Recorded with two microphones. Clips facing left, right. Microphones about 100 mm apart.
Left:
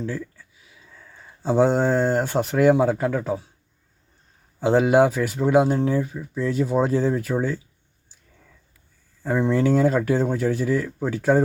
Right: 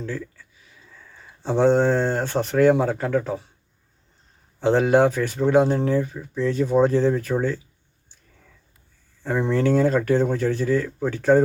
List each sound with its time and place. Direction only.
0.0 s speech: 10° left (ahead or behind)
4.6 s speech: 10° left (ahead or behind)
9.2 s speech: 5° left (ahead or behind)